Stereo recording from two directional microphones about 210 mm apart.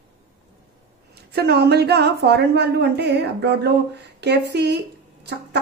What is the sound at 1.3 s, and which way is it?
A woman's voice, 50° right (ahead or behind).